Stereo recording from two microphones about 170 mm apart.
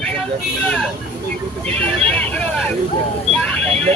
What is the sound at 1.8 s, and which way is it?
Speech, 5° left (ahead or behind).